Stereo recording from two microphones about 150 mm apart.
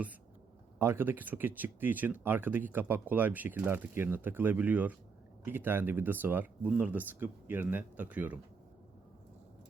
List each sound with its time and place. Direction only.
0.8 s speech: 15° right (ahead or behind)